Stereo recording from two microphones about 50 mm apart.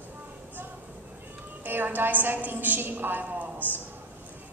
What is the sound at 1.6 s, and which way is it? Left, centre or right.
A woman's voice, right.